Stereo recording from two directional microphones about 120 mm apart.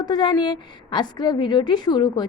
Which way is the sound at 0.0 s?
35° left (ahead or behind).